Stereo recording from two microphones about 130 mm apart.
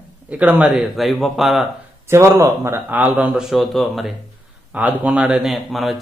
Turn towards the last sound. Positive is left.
turn(degrees=0)  # may be behind; listen again after turning